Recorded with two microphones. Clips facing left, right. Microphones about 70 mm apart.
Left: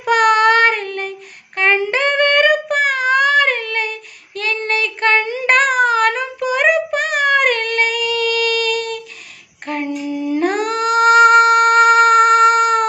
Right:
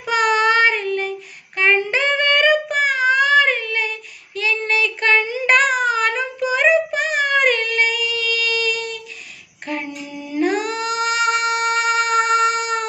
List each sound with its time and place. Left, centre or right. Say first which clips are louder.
0.0 s child singing: left 5 dB; left
1.9 s a sound: left 3 dB; left
4.4 s child singing: even; left
5.2 s child singing: left 2 dB; left
9.8 s female singing: left 9 dB; left
10.4 s a sound: even; left